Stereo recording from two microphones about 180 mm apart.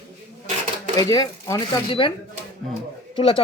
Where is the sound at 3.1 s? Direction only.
30° left (ahead or behind).